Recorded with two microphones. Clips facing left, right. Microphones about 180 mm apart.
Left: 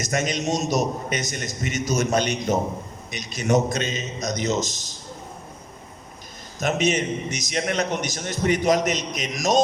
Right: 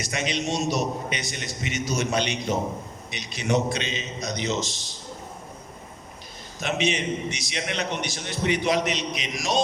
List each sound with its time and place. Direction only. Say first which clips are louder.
0.0 s a man's voice: left 3 dB; 45° left (ahead or behind)
6.6 s a man's voice: left 4 dB; 45° left (ahead or behind)